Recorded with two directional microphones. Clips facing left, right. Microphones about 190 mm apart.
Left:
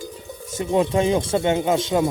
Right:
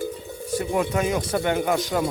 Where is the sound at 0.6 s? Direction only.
25° left (ahead or behind).